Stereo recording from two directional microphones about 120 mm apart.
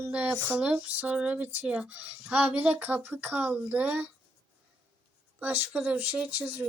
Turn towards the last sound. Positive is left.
turn(degrees=-10)  # may be behind; listen again after turning